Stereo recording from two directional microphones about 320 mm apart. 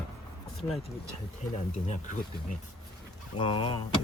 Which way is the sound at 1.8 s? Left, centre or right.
Left.